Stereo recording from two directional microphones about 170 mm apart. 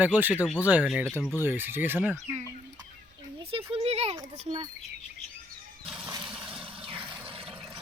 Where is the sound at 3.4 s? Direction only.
35° right (ahead or behind).